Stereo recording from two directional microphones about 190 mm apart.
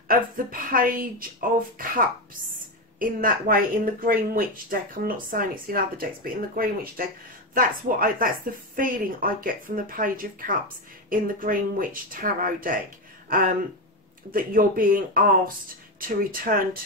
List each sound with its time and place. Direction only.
0.1 s speech: 50° right (ahead or behind)
14.3 s speech: 45° right (ahead or behind)